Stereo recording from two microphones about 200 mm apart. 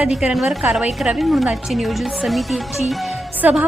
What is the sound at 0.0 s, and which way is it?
A woman's voice, 5° right (ahead or behind).